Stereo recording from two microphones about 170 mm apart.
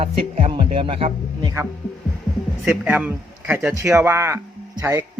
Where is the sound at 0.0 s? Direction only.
35° right (ahead or behind).